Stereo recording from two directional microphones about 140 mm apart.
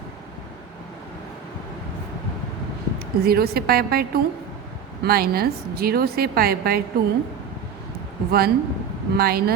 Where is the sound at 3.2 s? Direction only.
90° right.